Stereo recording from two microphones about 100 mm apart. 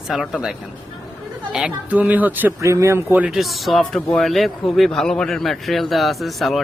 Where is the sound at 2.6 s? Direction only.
30° right (ahead or behind).